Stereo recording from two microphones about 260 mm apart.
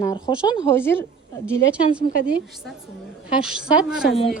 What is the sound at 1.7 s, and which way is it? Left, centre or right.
Speech, centre.